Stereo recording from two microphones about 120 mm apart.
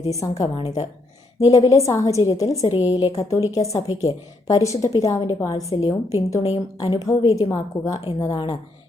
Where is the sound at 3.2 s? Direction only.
25° left (ahead or behind).